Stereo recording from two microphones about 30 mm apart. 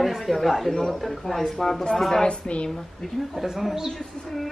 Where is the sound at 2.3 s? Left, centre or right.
Left.